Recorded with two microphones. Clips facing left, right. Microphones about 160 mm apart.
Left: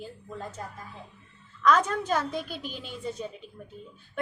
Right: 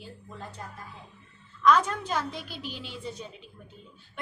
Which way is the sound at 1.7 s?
45° left (ahead or behind).